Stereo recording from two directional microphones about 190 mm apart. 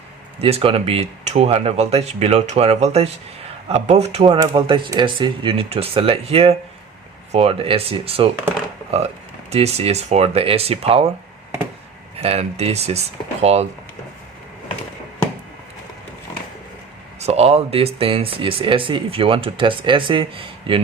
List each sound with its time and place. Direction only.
0.3 s speech: 30° right (ahead or behind)
9.5 s speech: 35° right (ahead or behind)
12.1 s speech: 30° right (ahead or behind)
17.2 s speech: 35° right (ahead or behind)